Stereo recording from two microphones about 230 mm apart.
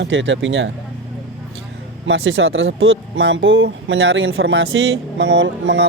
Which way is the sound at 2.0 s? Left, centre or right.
Right.